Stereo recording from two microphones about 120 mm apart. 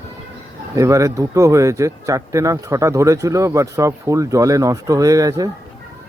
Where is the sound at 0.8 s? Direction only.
25° right (ahead or behind).